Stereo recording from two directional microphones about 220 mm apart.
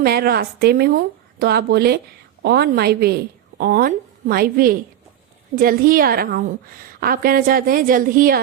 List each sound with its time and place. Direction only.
0.0 s a woman's voice: 45° right (ahead or behind)